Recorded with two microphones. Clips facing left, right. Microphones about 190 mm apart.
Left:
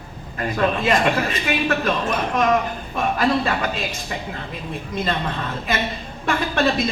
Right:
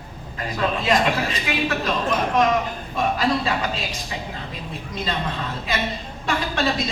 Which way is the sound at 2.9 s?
55° left (ahead or behind).